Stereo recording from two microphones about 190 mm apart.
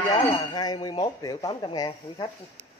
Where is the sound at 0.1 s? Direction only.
20° left (ahead or behind).